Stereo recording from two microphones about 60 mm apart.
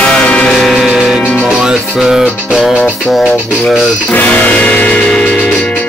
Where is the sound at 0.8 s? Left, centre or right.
Centre.